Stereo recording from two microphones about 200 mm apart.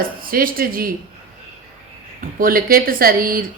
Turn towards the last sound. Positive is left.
turn(degrees=-45)  # may be behind; listen again after turning